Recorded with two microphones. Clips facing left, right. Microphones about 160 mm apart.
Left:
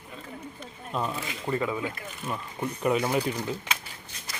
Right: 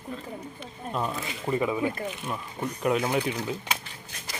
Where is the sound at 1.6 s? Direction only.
15° right (ahead or behind).